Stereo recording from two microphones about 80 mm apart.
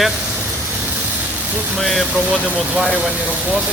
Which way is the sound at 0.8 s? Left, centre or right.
Centre.